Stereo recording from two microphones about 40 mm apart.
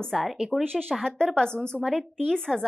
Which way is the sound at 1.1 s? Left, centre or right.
Centre.